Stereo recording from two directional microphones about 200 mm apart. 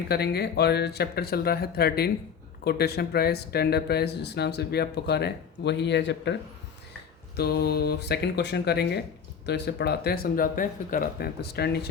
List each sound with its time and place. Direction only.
0.1 s speech: 55° left (ahead or behind)
7.3 s speech: 55° left (ahead or behind)